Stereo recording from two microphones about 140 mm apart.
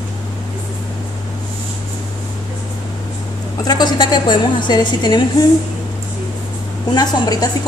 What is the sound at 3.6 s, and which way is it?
A woman's voice, 30° left (ahead or behind).